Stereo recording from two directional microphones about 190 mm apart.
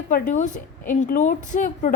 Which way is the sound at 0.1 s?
40° left (ahead or behind).